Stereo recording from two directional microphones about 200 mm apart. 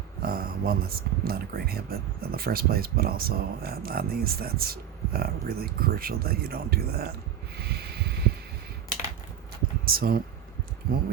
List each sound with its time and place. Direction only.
0.2 s speech: 50° right (ahead or behind)
7.5 s sanding: 55° right (ahead or behind)
9.8 s speech: 50° right (ahead or behind)